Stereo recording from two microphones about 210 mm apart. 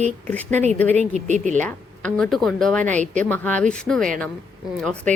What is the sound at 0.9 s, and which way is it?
Speech, 35° right (ahead or behind).